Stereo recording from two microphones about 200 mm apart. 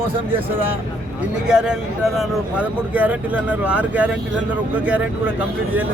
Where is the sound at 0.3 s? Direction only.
10° right (ahead or behind).